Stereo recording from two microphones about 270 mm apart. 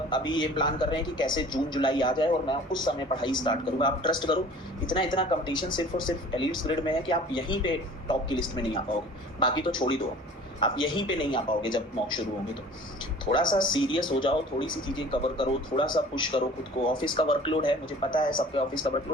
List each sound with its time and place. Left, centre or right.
0.1 s speech: centre
13.5 s a man's voice: centre